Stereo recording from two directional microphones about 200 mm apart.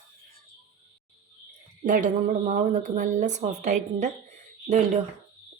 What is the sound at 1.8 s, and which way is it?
Speech, 40° right (ahead or behind).